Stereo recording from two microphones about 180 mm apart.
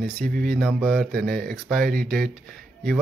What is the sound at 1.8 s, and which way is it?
Speech, 55° right (ahead or behind).